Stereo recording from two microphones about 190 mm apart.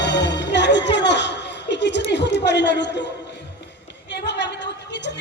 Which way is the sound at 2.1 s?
65° left (ahead or behind).